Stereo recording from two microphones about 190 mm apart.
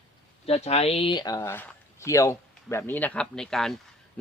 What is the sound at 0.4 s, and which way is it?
Speech, 35° left (ahead or behind).